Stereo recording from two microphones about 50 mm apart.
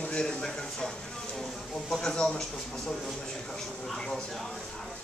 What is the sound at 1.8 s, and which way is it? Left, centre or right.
Speech, centre.